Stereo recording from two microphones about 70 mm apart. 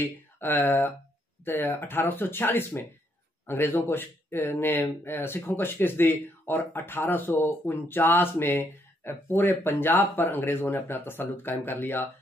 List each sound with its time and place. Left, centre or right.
0.0 s speech: left